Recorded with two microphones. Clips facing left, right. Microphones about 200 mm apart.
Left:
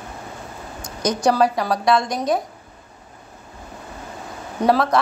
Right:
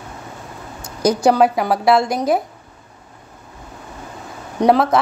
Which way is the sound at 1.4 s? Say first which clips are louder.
Right 3 dB; 25° right (ahead or behind).